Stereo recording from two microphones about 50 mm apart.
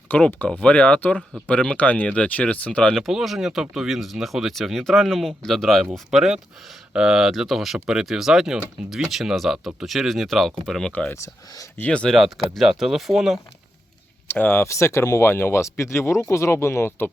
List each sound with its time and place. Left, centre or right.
0.1 s speech: left
2.9 s speech: centre
6.1 s speech: centre
10.7 s speech: centre
12.5 s speech: centre
14.3 s speech: left
14.6 s speech: left
15.3 s speech: left
15.8 s speech: left